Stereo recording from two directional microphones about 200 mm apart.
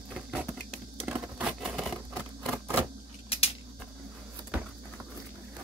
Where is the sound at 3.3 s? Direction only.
30° left (ahead or behind).